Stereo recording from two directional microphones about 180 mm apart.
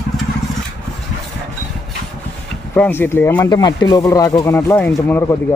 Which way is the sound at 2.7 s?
10° left (ahead or behind).